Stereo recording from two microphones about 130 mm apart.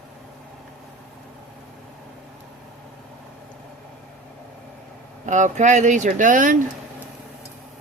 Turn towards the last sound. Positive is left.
turn(degrees=-80)